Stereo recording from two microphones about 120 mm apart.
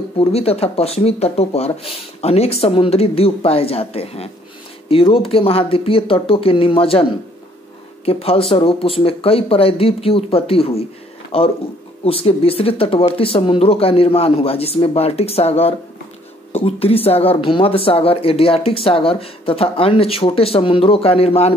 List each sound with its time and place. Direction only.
0.2 s speech: 55° left (ahead or behind)